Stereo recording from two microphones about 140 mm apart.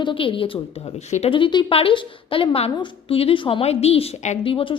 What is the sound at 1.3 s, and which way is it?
A woman's voice, 35° left (ahead or behind).